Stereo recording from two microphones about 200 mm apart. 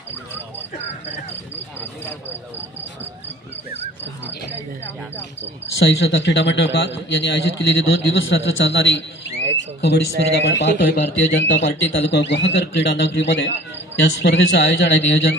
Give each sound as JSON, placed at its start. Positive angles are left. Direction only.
{"t": 5.8, "sound": "speech", "side_deg": 60}